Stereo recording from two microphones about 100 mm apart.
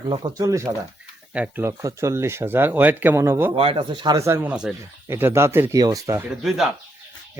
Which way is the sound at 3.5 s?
70° right (ahead or behind).